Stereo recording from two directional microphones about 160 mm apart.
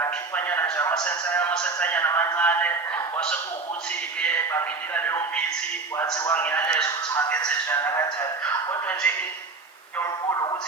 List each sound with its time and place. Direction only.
0.0 s a man's voice: 10° left (ahead or behind)
4.2 s a man's voice: 10° left (ahead or behind)
10.0 s a sound: 20° left (ahead or behind)